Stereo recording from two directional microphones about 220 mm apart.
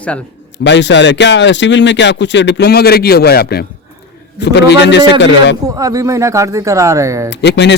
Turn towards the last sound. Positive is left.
turn(degrees=50)  # may be behind; listen again after turning